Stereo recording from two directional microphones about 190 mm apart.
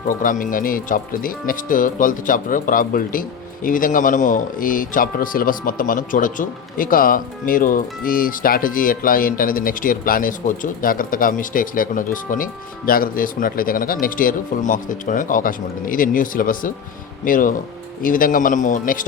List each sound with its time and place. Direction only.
0.2 s speech: 45° left (ahead or behind)